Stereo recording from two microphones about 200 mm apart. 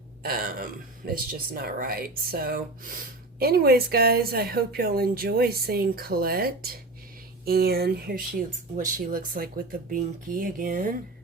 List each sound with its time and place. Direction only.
0.2 s a woman's voice: 45° right (ahead or behind)